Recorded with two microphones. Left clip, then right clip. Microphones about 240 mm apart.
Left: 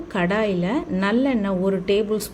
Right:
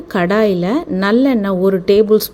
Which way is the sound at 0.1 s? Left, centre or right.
Right.